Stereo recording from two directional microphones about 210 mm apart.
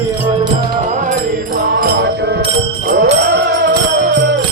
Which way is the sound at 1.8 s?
45° right (ahead or behind).